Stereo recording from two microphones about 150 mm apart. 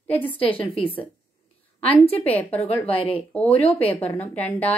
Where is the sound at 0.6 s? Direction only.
40° left (ahead or behind).